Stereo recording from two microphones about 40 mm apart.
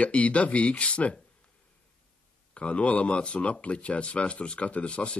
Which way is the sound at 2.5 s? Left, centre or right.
Left.